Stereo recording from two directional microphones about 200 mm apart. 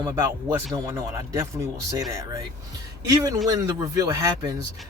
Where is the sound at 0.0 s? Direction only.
15° right (ahead or behind).